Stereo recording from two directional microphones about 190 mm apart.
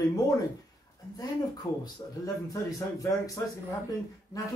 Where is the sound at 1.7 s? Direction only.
20° left (ahead or behind).